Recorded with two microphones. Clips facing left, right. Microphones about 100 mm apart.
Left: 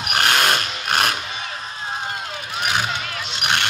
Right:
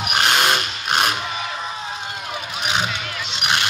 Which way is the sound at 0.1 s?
15° right (ahead or behind).